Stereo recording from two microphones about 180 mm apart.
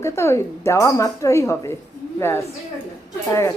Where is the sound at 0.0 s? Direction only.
15° left (ahead or behind).